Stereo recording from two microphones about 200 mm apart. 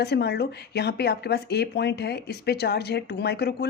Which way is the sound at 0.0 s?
55° left (ahead or behind).